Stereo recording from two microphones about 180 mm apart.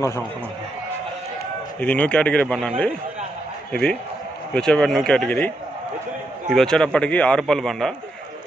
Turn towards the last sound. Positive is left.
turn(degrees=0)  # may be behind; listen again after turning